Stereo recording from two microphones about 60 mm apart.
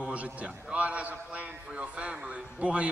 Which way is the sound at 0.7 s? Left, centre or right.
Right.